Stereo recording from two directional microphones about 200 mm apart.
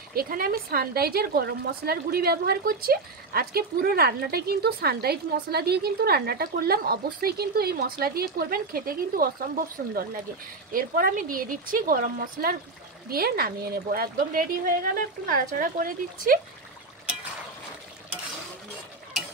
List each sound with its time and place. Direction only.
0.1 s a woman's voice: 50° right (ahead or behind)